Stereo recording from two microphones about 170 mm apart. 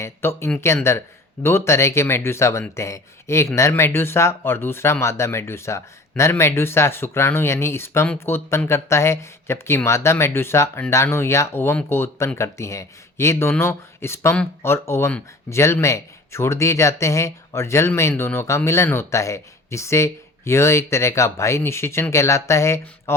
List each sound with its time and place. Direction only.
0.0 s speech: 15° left (ahead or behind)